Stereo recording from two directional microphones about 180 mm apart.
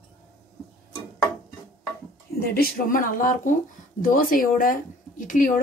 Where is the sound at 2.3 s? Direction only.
55° left (ahead or behind).